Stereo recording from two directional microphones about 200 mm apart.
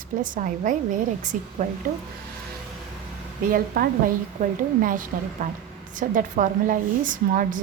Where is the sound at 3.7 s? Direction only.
50° right (ahead or behind).